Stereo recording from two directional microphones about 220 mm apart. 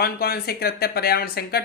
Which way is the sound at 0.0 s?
45° left (ahead or behind).